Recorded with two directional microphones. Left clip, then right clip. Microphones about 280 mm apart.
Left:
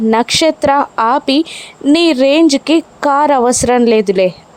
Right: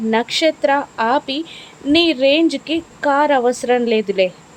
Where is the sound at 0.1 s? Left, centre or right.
Left.